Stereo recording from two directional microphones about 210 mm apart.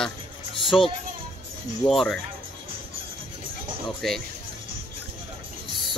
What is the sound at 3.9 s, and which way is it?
Speech, centre (ahead or behind).